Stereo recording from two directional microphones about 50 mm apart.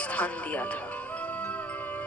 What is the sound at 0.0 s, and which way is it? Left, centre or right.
Music, left.